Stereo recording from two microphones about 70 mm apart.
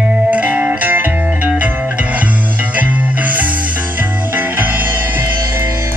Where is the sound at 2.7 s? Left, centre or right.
Right.